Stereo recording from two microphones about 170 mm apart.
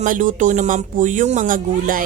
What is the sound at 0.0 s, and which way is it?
Speech, 50° right (ahead or behind).